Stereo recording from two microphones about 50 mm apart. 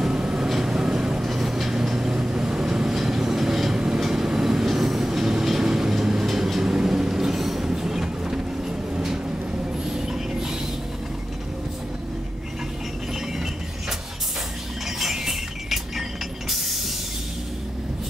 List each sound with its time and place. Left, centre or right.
0.0 s vehicle: centre
0.5 s vehicle: centre
15.0 s mechanisms: centre